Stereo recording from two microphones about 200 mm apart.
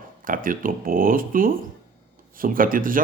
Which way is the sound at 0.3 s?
45° right (ahead or behind).